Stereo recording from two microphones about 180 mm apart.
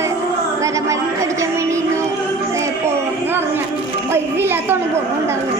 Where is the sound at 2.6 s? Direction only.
15° right (ahead or behind).